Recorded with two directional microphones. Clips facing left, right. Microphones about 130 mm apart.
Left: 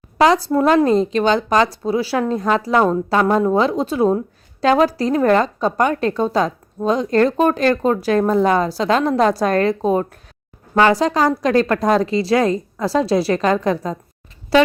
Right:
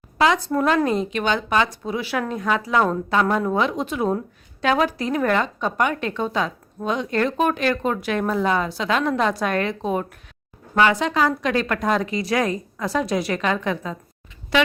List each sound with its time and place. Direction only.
0.2 s a woman's voice: 35° left (ahead or behind)